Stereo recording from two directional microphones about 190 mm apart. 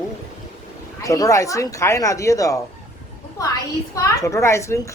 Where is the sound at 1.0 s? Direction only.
15° left (ahead or behind).